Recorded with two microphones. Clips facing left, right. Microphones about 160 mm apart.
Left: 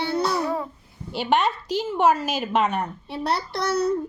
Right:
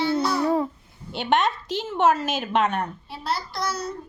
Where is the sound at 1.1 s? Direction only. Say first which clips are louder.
Even; 5° left (ahead or behind).